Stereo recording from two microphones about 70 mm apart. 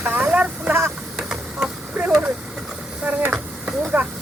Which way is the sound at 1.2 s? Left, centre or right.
Centre.